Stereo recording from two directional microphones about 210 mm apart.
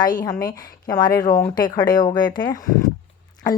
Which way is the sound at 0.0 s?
20° left (ahead or behind).